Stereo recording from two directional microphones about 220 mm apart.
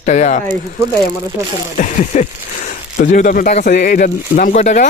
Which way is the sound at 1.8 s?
35° left (ahead or behind).